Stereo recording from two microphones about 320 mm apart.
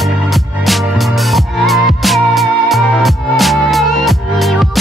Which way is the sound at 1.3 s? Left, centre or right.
Centre.